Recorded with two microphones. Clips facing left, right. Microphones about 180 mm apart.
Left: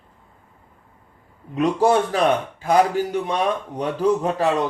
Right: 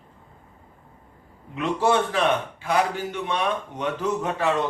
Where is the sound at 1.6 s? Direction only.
40° left (ahead or behind).